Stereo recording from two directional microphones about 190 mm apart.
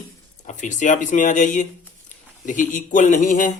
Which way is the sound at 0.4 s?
40° left (ahead or behind).